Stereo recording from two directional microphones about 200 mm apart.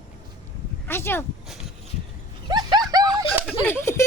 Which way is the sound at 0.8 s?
10° left (ahead or behind).